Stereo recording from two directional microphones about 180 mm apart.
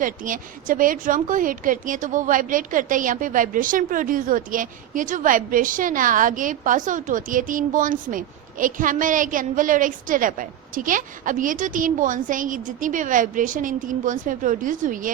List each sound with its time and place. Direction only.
0.0 s a woman's voice: 50° right (ahead or behind)